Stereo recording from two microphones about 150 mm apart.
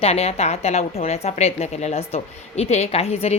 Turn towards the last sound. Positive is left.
turn(degrees=40)  # may be behind; listen again after turning